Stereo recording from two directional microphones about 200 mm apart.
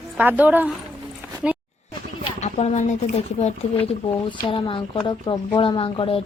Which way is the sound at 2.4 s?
35° left (ahead or behind).